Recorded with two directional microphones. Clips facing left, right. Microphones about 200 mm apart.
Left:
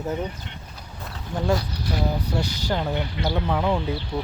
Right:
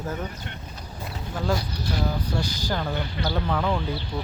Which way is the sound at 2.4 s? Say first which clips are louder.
Left 2 dB; 65° left (ahead or behind).